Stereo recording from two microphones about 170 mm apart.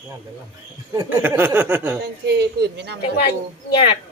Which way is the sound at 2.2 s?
75° right (ahead or behind).